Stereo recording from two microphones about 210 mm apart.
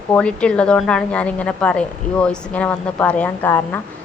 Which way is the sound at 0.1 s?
5° left (ahead or behind).